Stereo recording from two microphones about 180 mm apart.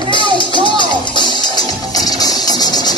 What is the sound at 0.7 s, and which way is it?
Music, 25° left (ahead or behind).